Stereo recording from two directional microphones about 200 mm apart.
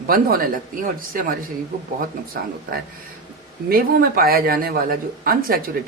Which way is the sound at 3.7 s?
45° right (ahead or behind).